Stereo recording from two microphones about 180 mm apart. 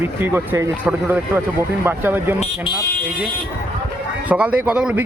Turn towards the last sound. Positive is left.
turn(degrees=-5)  # may be behind; listen again after turning